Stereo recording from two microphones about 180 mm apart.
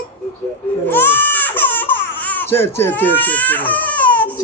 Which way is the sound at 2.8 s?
10° left (ahead or behind).